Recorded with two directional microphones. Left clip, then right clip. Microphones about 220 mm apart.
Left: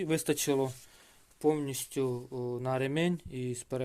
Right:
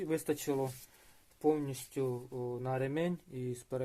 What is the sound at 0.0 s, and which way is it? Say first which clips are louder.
Speech: left 4 dB; 40° left (ahead or behind).